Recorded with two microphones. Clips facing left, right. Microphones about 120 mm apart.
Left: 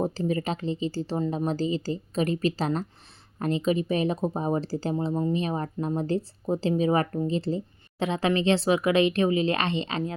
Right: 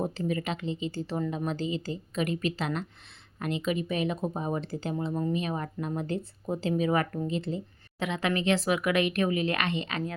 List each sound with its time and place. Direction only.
0.0 s speech: 35° left (ahead or behind)